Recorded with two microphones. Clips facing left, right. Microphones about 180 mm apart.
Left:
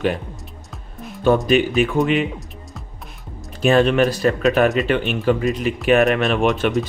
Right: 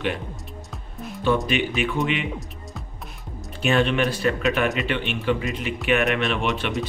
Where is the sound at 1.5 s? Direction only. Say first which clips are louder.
Left 8 dB; 40° left (ahead or behind).